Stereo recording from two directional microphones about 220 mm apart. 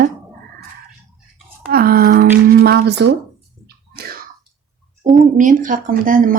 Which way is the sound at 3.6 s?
45° right (ahead or behind).